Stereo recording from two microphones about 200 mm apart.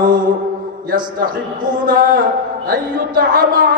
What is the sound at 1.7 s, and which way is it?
Music, 45° right (ahead or behind).